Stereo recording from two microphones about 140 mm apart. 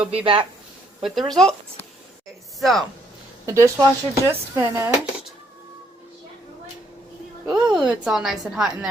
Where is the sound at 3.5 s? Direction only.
20° right (ahead or behind).